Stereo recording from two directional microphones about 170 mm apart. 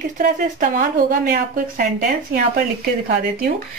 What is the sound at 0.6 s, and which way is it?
A woman's voice, 60° right (ahead or behind).